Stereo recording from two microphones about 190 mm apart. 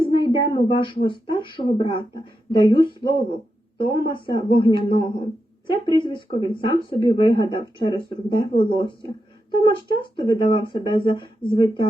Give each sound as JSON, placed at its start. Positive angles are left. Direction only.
{"t": 0.0, "sound": "speech", "side_deg": 25}